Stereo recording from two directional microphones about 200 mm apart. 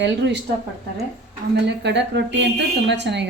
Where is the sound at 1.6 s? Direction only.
60° right (ahead or behind).